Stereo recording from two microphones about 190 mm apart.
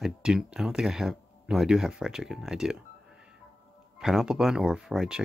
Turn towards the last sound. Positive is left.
turn(degrees=-5)  # may be behind; listen again after turning